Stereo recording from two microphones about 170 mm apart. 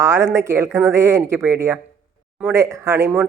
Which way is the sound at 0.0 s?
15° right (ahead or behind).